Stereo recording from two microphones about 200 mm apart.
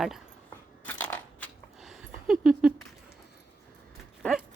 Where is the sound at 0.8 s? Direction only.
5° left (ahead or behind).